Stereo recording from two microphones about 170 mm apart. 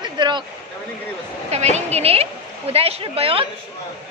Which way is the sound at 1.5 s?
40° right (ahead or behind).